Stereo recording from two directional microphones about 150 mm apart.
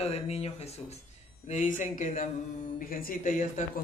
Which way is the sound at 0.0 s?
45° left (ahead or behind).